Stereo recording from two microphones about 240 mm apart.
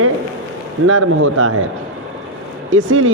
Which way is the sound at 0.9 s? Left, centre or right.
Right.